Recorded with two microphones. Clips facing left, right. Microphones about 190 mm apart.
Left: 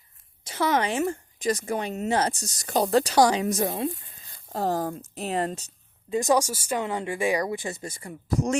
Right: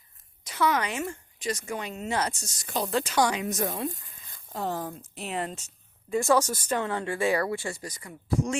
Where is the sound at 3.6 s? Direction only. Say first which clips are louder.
Left 3 dB; 20° left (ahead or behind).